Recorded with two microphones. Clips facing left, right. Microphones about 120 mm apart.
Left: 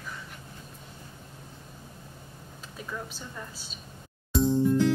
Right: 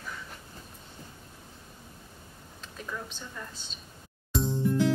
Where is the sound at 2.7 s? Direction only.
5° left (ahead or behind).